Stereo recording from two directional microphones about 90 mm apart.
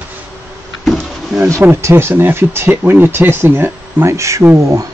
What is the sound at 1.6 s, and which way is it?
Speech, 25° right (ahead or behind).